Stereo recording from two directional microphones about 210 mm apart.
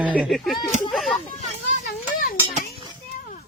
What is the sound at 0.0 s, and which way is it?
Speech, 5° right (ahead or behind).